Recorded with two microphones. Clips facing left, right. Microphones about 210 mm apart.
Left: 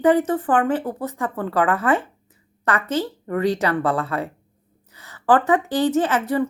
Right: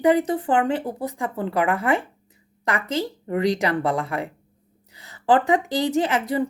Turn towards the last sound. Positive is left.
turn(degrees=-15)  # may be behind; listen again after turning